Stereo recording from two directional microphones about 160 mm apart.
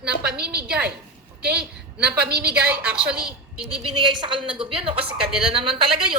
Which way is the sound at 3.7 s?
30° right (ahead or behind).